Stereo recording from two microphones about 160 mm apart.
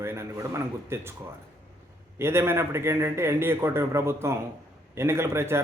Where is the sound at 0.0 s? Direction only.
15° right (ahead or behind).